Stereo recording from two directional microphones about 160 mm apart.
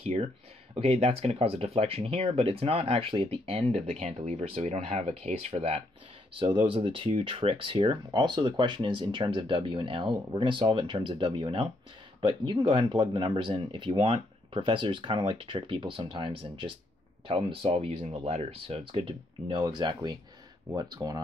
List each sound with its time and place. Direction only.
0.0 s speech: 40° right (ahead or behind)
3.9 s speech: 50° right (ahead or behind); by 21.2 s 25° right (ahead or behind)